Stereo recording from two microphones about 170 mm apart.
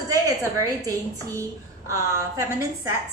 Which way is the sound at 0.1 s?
20° right (ahead or behind).